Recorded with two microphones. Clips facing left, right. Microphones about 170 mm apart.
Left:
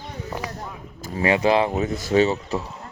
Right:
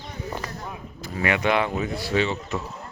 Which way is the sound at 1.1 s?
30° left (ahead or behind).